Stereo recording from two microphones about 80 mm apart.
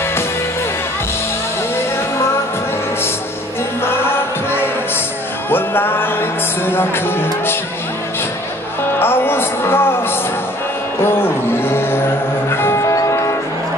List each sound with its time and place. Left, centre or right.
3.8 s music: left
9.0 s a sound: left
12.4 s music: left